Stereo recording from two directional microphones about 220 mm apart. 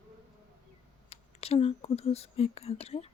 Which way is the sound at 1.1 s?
25° left (ahead or behind).